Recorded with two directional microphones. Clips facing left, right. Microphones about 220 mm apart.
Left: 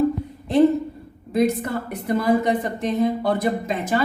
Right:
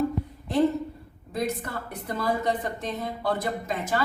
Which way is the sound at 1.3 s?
20° left (ahead or behind).